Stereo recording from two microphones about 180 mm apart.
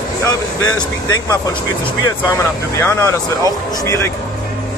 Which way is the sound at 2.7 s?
15° left (ahead or behind).